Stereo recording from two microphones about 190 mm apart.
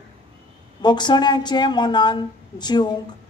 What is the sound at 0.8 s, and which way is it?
A man's voice, 25° left (ahead or behind).